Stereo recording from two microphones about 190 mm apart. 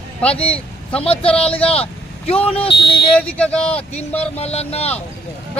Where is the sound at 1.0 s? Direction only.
30° left (ahead or behind).